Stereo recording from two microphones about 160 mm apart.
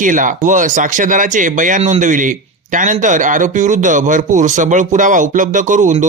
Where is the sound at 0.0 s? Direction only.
55° right (ahead or behind).